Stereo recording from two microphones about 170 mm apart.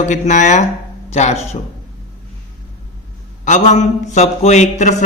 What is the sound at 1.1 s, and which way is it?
Speech, 40° left (ahead or behind).